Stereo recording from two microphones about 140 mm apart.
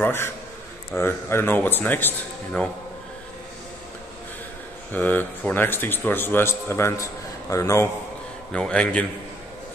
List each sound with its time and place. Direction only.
0.0 s a man's voice: 15° left (ahead or behind)
4.9 s a man's voice: 10° left (ahead or behind)
8.5 s a man's voice: 5° left (ahead or behind)